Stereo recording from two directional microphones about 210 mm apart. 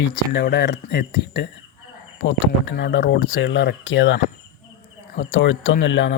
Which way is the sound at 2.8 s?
55° left (ahead or behind).